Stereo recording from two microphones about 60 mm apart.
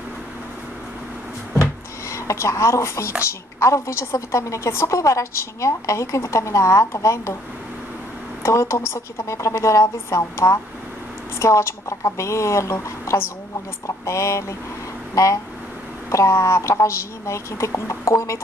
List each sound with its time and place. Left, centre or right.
2.0 s a woman's voice: left
8.4 s a woman's voice: left
16.1 s a woman's voice: left